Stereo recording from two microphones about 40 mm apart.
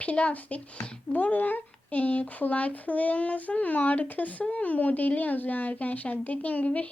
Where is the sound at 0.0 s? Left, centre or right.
Left.